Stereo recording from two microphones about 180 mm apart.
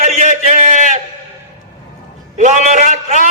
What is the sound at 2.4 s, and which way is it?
Speech, 40° right (ahead or behind).